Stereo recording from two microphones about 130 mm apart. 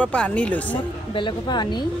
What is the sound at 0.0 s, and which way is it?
Speech, 10° left (ahead or behind).